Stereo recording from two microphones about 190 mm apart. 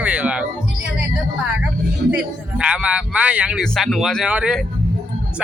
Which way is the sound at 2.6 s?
5° right (ahead or behind).